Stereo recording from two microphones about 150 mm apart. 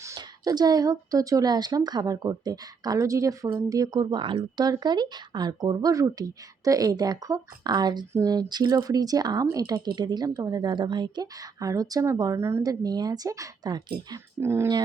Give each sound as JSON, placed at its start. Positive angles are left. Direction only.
{"t": 0.0, "sound": "a woman's voice", "side_deg": -25}